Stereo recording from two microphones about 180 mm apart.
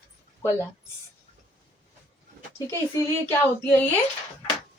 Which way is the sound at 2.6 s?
15° left (ahead or behind).